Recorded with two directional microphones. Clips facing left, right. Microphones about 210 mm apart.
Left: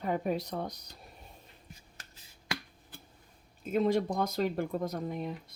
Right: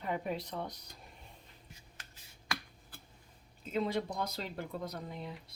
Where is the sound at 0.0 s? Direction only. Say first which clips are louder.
Left 5 dB; 45° left (ahead or behind).